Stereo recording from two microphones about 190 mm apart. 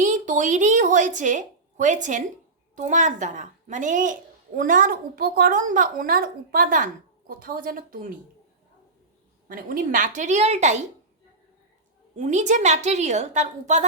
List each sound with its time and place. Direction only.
0.0 s a woman's voice: 40° right (ahead or behind)
9.5 s a woman's voice: 45° right (ahead or behind)
12.1 s a woman's voice: 40° right (ahead or behind)